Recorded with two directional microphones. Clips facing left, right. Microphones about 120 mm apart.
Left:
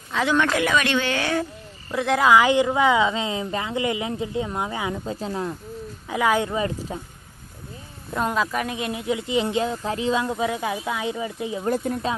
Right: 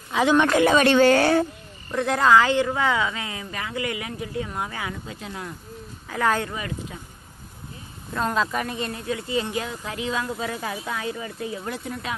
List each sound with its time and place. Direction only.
0.1 s speech: 15° right (ahead or behind)
0.6 s speech: 35° right (ahead or behind)
1.9 s speech: 5° left (ahead or behind)
2.3 s a woman's voice: 15° left (ahead or behind)
5.0 s speech: 35° left (ahead or behind)
6.0 s speech: 15° left (ahead or behind)
6.5 s a woman's voice: 30° left (ahead or behind)
8.2 s speech: 5° left (ahead or behind)
9.0 s a woman's voice: 20° left (ahead or behind)
10.1 s speech: 20° left (ahead or behind)
11.6 s speech: 45° left (ahead or behind)